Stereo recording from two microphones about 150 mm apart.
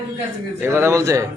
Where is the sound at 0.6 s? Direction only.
15° right (ahead or behind).